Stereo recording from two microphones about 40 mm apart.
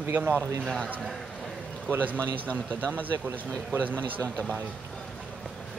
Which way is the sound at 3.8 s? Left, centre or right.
Right.